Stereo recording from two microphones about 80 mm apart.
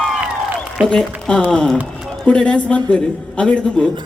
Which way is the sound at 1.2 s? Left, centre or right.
Centre.